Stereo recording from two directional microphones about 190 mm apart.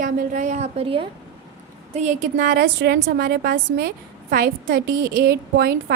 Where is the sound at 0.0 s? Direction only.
45° right (ahead or behind).